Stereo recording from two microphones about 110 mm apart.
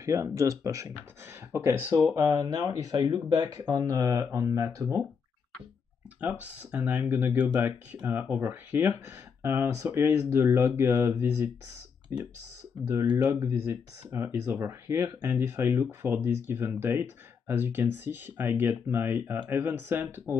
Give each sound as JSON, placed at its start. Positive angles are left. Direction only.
{"t": 0.0, "sound": "speech", "side_deg": -30}
{"t": 6.2, "sound": "speech", "side_deg": -15}
{"t": 13.3, "sound": "speech", "side_deg": -20}